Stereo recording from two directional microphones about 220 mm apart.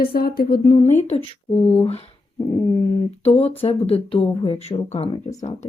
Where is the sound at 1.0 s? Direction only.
25° left (ahead or behind).